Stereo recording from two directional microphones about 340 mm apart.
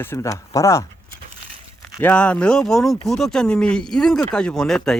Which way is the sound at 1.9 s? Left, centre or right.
Centre.